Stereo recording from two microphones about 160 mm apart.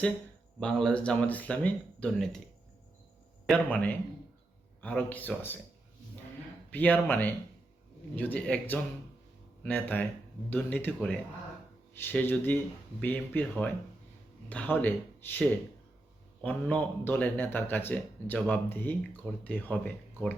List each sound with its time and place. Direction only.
0.6 s speech: 5° left (ahead or behind)
3.4 s speech: 10° left (ahead or behind)
6.7 s speech: 10° left (ahead or behind)